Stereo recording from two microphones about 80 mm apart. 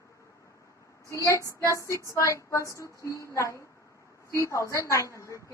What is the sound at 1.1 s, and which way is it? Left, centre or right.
A woman's voice, left.